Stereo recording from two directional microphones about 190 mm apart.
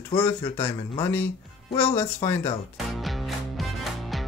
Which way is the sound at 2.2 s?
20° left (ahead or behind).